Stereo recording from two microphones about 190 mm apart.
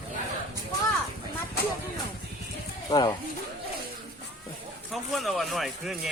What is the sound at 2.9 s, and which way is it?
Speech, 20° left (ahead or behind).